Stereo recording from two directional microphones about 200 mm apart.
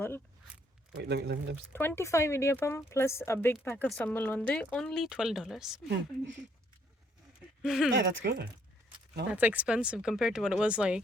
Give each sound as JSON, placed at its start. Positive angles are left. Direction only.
{"t": 1.0, "sound": "speech", "side_deg": -55}
{"t": 1.7, "sound": "speech", "side_deg": 10}
{"t": 7.6, "sound": "speech", "side_deg": -5}
{"t": 7.9, "sound": "speech", "side_deg": -60}
{"t": 9.3, "sound": "speech", "side_deg": -10}